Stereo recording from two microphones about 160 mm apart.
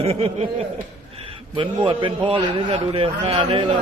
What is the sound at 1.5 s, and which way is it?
A man's voice, 30° right (ahead or behind).